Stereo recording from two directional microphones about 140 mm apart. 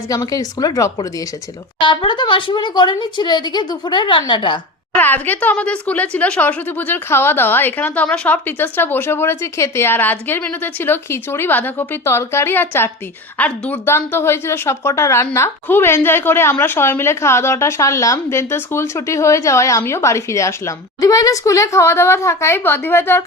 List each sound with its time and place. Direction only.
0.1 s a woman's voice: 25° left (ahead or behind)
4.9 s a woman's voice: 15° left (ahead or behind)